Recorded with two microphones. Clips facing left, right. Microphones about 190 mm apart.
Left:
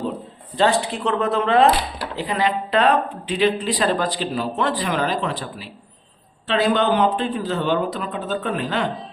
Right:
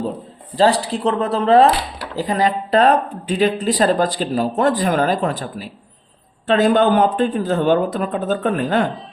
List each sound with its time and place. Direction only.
0.5 s speech: 35° right (ahead or behind)